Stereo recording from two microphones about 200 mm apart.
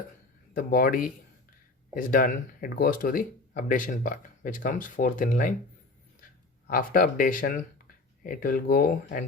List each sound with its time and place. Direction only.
0.5 s speech: 45° left (ahead or behind)
6.7 s speech: 45° left (ahead or behind)